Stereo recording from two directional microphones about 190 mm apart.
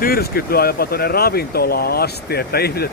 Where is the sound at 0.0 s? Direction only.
50° left (ahead or behind).